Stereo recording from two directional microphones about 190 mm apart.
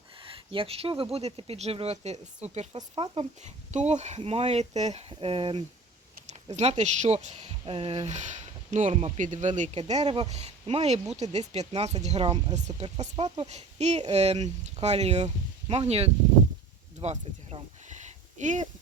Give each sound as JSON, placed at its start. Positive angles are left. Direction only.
{"t": 0.3, "sound": "speech", "side_deg": -30}
{"t": 12.5, "sound": "speech", "side_deg": -35}
{"t": 17.0, "sound": "a sound", "side_deg": -35}